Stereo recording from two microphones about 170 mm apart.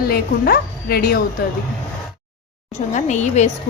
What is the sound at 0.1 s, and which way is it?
Speech, 65° left (ahead or behind).